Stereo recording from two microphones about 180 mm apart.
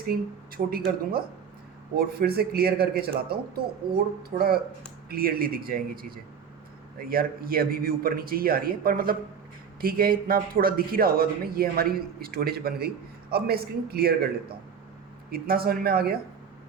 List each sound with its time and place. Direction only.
0.1 s speech: 55° right (ahead or behind)
2.0 s speech: 60° right (ahead or behind)
15.3 s speech: 55° right (ahead or behind)